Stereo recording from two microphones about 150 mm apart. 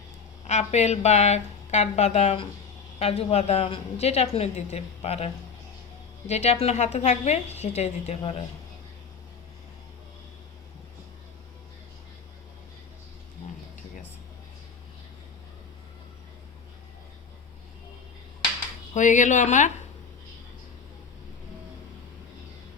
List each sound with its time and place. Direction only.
0.4 s a woman's voice: 50° left (ahead or behind)
18.9 s speech: 55° left (ahead or behind)